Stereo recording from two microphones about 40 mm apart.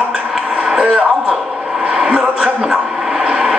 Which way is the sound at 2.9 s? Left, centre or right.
Right.